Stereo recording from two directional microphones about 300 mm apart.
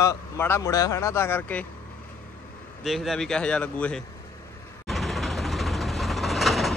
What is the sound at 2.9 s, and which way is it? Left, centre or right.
A man's voice, centre.